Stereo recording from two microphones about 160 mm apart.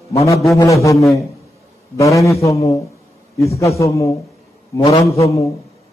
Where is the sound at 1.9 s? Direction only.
20° left (ahead or behind).